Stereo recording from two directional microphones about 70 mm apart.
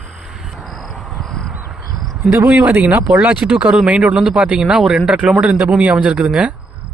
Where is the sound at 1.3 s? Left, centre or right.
Centre.